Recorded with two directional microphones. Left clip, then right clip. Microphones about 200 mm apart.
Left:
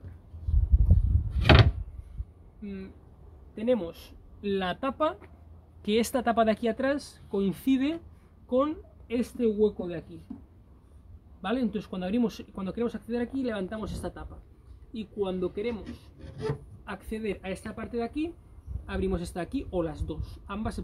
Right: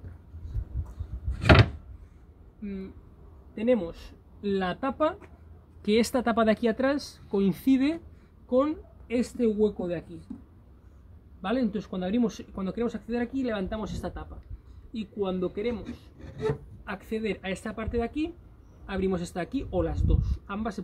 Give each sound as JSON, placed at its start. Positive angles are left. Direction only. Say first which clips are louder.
{"t": 3.5, "sound": "speech", "louder": "right 2 dB", "side_deg": -5}
{"t": 8.5, "sound": "speech", "louder": "right 2 dB", "side_deg": -10}
{"t": 11.4, "sound": "speech", "louder": "right 1 dB", "side_deg": 5}